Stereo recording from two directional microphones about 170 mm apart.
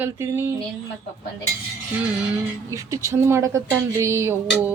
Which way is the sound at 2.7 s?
15° right (ahead or behind).